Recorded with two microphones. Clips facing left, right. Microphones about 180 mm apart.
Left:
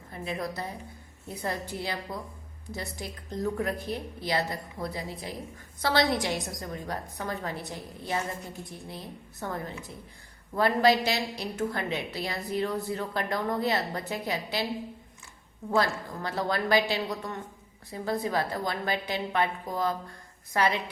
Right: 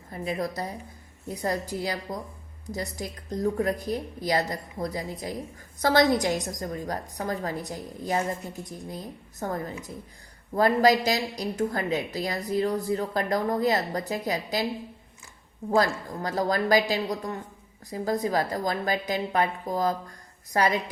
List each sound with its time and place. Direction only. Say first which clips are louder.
0.1 s a woman's voice: right 4 dB; 35° right (ahead or behind)
15.7 s a woman's voice: right 3 dB; 40° right (ahead or behind)